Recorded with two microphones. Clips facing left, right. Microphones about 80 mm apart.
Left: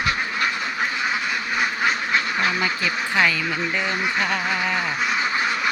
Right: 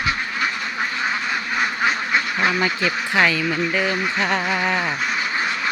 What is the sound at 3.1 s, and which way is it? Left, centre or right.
Speech, centre.